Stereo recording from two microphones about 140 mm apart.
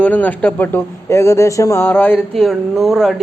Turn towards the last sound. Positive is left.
turn(degrees=0)  # may be behind; listen again after turning